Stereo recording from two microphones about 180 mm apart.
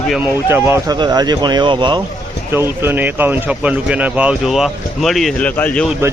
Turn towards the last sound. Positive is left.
turn(degrees=5)  # may be behind; listen again after turning